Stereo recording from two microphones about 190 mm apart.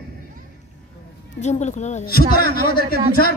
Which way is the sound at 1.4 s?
35° left (ahead or behind).